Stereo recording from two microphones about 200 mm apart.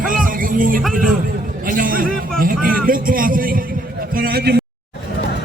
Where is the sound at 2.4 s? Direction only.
45° right (ahead or behind).